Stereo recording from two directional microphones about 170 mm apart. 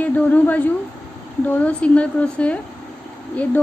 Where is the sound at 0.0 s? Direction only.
10° left (ahead or behind).